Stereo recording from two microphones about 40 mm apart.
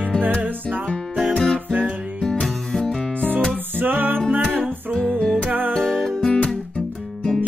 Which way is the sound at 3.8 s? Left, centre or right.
Right.